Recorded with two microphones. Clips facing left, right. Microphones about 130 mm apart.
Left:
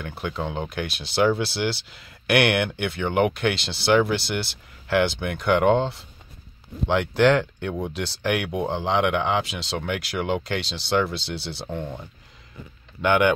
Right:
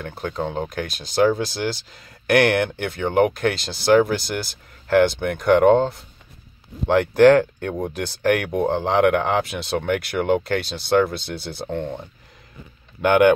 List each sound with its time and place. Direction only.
0.2 s speech: 35° right (ahead or behind); by 11.9 s 55° right (ahead or behind)
13.0 s speech: 50° right (ahead or behind)